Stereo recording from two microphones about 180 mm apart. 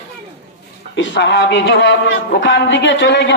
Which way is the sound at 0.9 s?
85° left.